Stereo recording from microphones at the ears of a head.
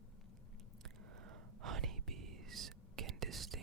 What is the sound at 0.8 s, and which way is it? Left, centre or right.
Whispering, right.